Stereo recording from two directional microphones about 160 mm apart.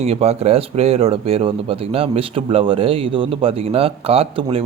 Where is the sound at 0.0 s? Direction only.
40° right (ahead or behind).